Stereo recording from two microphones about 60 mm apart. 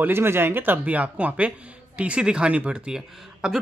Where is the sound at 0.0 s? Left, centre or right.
Right.